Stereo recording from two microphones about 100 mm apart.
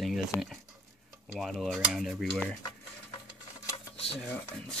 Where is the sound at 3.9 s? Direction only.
75° left (ahead or behind).